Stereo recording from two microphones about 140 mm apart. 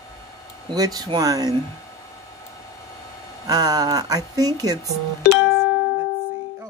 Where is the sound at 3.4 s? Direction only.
25° right (ahead or behind).